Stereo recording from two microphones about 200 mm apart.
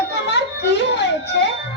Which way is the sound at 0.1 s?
60° left (ahead or behind).